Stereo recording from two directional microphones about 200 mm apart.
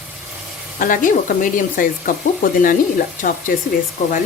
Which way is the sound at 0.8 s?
40° left (ahead or behind).